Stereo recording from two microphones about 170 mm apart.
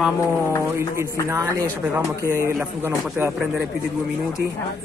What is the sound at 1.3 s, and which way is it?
Speech, 20° right (ahead or behind).